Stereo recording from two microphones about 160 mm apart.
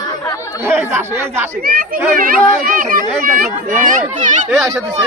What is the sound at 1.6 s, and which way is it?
Speech, 60° right (ahead or behind).